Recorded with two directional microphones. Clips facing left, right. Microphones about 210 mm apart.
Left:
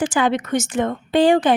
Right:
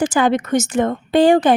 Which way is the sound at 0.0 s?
45° right (ahead or behind).